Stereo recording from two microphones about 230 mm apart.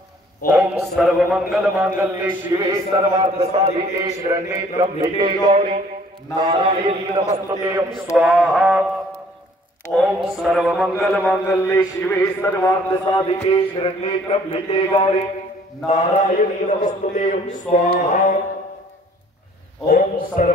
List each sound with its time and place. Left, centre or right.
0.9 s a man's voice: centre
2.2 s a man's voice: centre
5.2 s a man's voice: right
8.2 s mantra: centre
9.9 s a man's voice: centre
13.0 s a man's voice: left
19.9 s a man's voice: left